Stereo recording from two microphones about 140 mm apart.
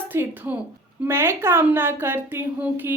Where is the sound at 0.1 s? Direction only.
15° right (ahead or behind).